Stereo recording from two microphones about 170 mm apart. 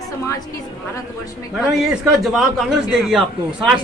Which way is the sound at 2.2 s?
Centre (ahead or behind).